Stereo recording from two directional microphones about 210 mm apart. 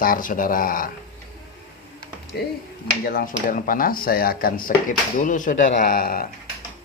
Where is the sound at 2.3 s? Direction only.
50° left (ahead or behind).